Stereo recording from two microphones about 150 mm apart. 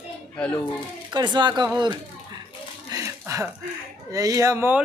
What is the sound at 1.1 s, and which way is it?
Speech, 30° right (ahead or behind).